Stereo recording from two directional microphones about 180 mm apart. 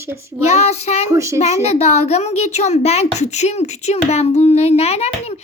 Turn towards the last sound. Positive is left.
turn(degrees=35)  # may be behind; listen again after turning